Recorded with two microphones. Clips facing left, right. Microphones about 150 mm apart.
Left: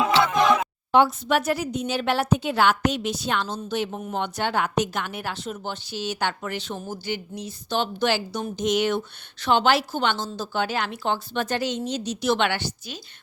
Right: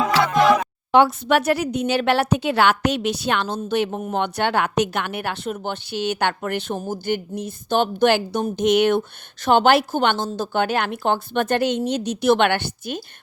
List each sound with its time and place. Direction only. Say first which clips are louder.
0.3 s music: right 6 dB; 5° right (ahead or behind)
0.9 s a woman's voice: right 3 dB; 70° right (ahead or behind)